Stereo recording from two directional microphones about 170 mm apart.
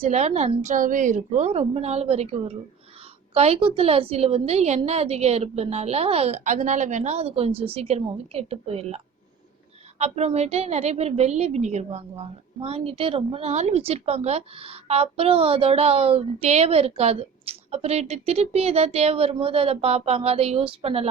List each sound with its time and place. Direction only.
0.0 s a woman's voice: 40° right (ahead or behind)
10.0 s a woman's voice: 40° right (ahead or behind)